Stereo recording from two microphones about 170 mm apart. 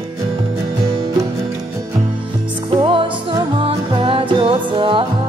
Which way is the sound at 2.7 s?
30° right (ahead or behind).